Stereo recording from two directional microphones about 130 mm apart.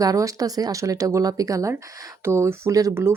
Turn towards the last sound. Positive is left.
turn(degrees=-20)  # may be behind; listen again after turning